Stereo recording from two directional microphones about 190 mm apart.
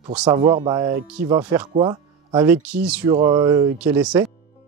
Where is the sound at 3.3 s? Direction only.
20° right (ahead or behind).